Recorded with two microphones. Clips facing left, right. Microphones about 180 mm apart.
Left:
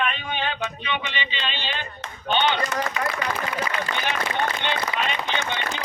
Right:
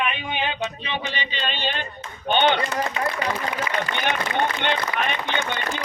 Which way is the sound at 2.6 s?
30° right (ahead or behind).